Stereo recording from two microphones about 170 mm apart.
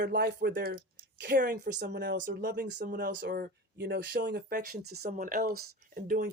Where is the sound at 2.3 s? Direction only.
65° right (ahead or behind); by 4.4 s 90° right.